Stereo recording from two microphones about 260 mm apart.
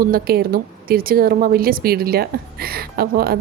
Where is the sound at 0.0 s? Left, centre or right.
Right.